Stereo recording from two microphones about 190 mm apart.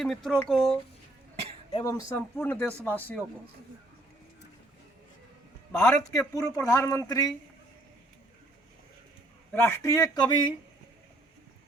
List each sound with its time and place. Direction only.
0.0 s speech: centre (ahead or behind)
1.7 s speech: 15° left (ahead or behind)
5.7 s speech: 5° left (ahead or behind)
6.0 s speech: 20° left (ahead or behind)
9.5 s speech: 15° left (ahead or behind)